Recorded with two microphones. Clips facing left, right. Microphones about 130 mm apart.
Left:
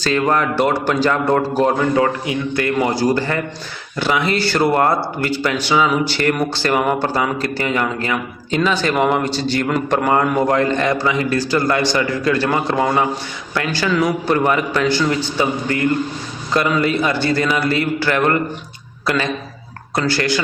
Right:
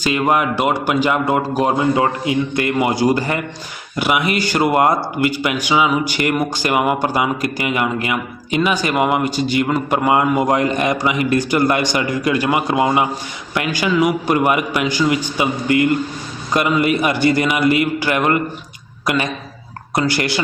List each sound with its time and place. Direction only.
0.0 s speech: 10° right (ahead or behind)
16.5 s speech: 15° right (ahead or behind)